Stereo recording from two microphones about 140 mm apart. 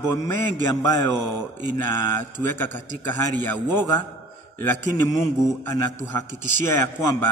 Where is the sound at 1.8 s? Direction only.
15° left (ahead or behind).